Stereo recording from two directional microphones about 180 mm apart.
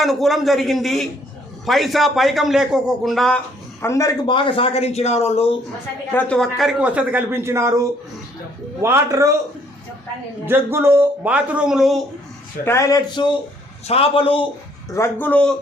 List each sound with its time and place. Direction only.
0.0 s a man's voice: centre (ahead or behind); by 5.5 s 35° left (ahead or behind)
6.1 s speech: 10° left (ahead or behind); by 7.7 s 15° right (ahead or behind)
8.8 s speech: 15° right (ahead or behind)
10.4 s speech: 15° right (ahead or behind)
12.6 s a man's voice: 15° left (ahead or behind)
13.8 s a man's voice: 30° left (ahead or behind)
14.8 s speech: 15° left (ahead or behind)